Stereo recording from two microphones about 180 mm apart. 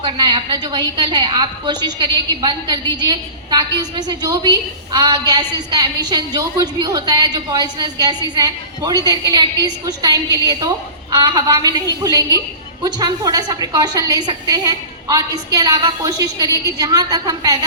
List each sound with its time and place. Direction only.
0.0 s a woman's voice: 25° right (ahead or behind)